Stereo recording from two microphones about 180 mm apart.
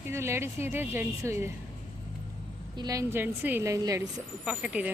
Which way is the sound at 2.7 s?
20° right (ahead or behind).